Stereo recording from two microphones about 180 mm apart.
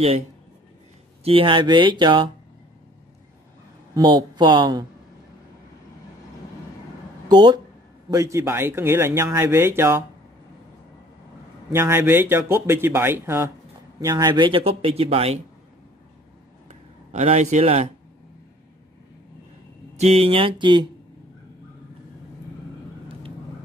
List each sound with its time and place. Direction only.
1.2 s speech: 30° right (ahead or behind)
3.9 s speech: 25° right (ahead or behind)
7.2 s speech: 25° right (ahead or behind)
11.7 s speech: 15° right (ahead or behind); by 15.4 s 35° right (ahead or behind)
16.6 s a sound: 40° right (ahead or behind)
20.0 s speech: 35° right (ahead or behind)